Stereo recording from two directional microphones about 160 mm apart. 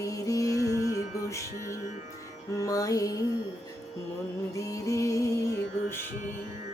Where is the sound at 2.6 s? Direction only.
20° left (ahead or behind).